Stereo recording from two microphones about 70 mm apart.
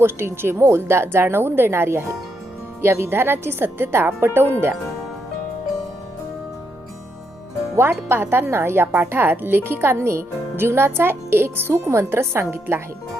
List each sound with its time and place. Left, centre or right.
0.0 s a woman's voice: right
7.8 s a woman's voice: right